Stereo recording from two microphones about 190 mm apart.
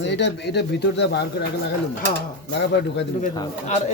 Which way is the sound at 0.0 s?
65° left (ahead or behind).